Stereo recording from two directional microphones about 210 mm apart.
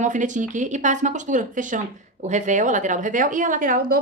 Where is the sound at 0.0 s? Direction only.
35° right (ahead or behind).